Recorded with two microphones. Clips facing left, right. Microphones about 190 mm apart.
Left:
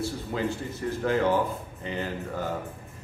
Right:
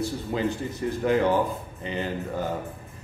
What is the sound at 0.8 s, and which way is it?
A man's voice, 15° right (ahead or behind).